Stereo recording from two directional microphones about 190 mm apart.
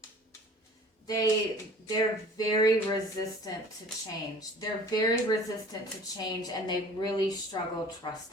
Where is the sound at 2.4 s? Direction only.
20° left (ahead or behind).